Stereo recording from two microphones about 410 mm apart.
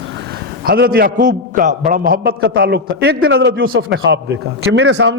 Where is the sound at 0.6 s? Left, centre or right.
Right.